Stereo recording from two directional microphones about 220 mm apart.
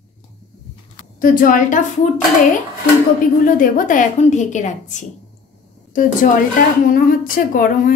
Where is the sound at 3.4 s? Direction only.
35° left (ahead or behind).